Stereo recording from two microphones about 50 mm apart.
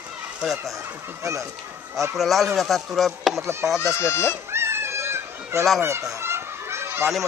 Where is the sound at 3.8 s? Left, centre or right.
Left.